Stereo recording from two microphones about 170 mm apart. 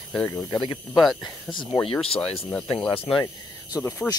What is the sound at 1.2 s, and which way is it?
Speech, 25° left (ahead or behind).